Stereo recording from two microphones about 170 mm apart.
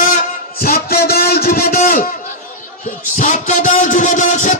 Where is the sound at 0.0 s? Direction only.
55° left (ahead or behind).